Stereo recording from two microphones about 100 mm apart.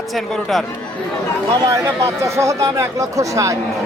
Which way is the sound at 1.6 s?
30° right (ahead or behind).